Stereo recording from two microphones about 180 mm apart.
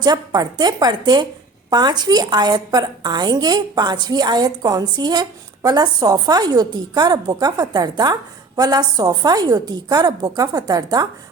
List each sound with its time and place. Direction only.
0.0 s a woman's voice: 20° right (ahead or behind)